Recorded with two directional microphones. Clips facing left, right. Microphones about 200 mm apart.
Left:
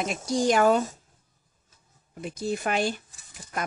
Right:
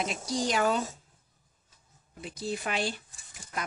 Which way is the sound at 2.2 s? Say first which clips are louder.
Left 5 dB; 50° left (ahead or behind).